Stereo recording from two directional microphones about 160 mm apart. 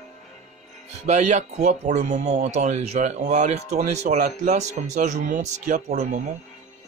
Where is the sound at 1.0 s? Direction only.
45° right (ahead or behind).